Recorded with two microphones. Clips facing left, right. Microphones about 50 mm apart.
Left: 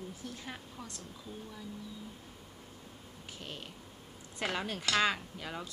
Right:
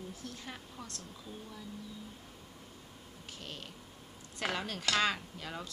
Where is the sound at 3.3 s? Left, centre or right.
Centre.